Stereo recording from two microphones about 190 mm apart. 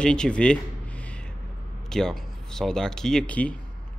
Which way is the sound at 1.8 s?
5° left (ahead or behind).